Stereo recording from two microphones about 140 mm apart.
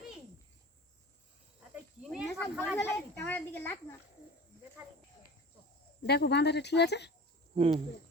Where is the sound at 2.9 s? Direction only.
10° left (ahead or behind).